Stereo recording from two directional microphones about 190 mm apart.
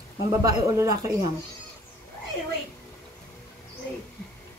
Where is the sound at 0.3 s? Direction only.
15° right (ahead or behind).